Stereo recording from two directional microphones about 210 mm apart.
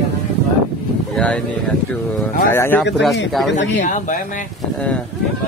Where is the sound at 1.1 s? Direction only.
5° left (ahead or behind).